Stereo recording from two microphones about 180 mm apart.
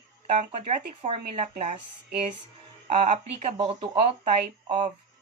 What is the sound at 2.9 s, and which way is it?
Speech, 40° right (ahead or behind).